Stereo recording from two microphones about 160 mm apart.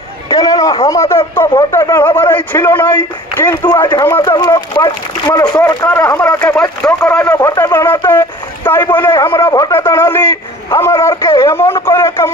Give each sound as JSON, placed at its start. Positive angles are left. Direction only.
{"t": 0.3, "sound": "a sound", "side_deg": 20}
{"t": 0.8, "sound": "a man's voice", "side_deg": 20}
{"t": 5.9, "sound": "a man's voice", "side_deg": 15}